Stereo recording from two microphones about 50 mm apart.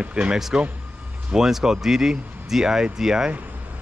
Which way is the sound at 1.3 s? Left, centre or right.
Centre.